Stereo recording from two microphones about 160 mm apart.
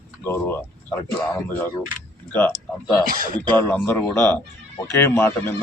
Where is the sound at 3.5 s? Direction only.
10° left (ahead or behind).